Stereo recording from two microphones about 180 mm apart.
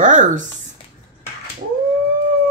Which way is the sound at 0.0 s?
45° right (ahead or behind).